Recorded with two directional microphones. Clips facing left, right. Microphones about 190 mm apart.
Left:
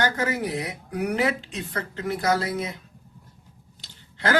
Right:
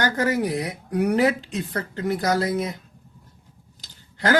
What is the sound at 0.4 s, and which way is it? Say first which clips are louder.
Speech: right 3 dB; 40° right (ahead or behind).